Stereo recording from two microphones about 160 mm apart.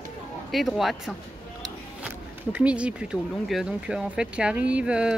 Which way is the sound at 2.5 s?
5° right (ahead or behind).